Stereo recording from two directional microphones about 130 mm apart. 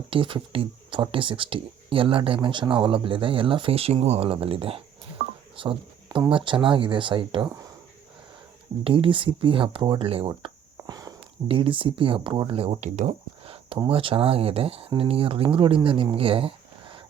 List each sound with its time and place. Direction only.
0.1 s speech: 40° right (ahead or behind)
8.8 s speech: 45° right (ahead or behind)
12.5 s speech: 50° right (ahead or behind)
13.8 s speech: 45° right (ahead or behind)